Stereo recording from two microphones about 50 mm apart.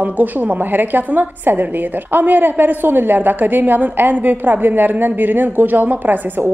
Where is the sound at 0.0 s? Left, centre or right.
Right.